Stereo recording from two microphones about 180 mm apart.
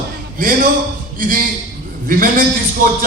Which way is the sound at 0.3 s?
50° right (ahead or behind).